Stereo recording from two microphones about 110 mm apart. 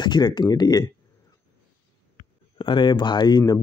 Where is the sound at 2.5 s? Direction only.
45° left (ahead or behind).